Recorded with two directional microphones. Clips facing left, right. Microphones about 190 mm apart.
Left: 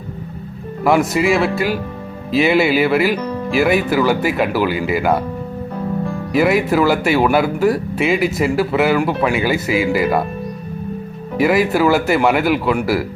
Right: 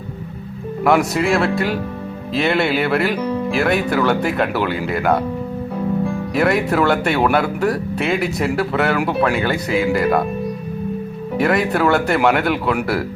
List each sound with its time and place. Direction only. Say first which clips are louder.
0.9 s speech: left 1 dB; centre (ahead or behind)
6.3 s speech: left 3 dB; centre (ahead or behind)
11.3 s speech: left 3 dB; 5° left (ahead or behind)